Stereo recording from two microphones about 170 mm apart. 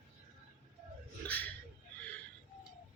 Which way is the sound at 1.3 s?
10° left (ahead or behind).